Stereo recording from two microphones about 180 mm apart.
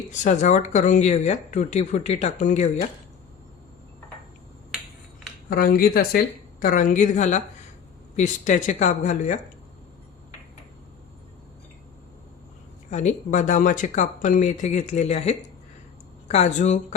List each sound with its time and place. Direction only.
0.1 s speech: 40° left (ahead or behind)
5.5 s speech: 55° left (ahead or behind)
12.9 s speech: 40° left (ahead or behind)